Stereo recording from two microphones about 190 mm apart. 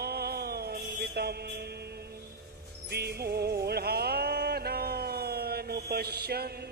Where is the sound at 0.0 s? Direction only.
55° right (ahead or behind).